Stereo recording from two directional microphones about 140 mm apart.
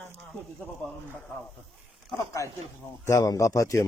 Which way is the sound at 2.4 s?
20° left (ahead or behind).